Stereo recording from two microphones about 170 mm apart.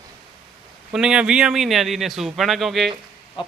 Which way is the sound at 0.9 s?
5° right (ahead or behind).